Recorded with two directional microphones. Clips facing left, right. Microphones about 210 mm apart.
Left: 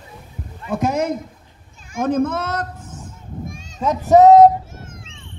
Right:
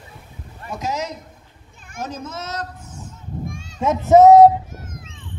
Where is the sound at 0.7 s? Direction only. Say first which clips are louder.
Left 7 dB; 55° left (ahead or behind).